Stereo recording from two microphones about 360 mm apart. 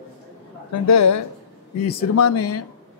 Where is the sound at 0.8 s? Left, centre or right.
Left.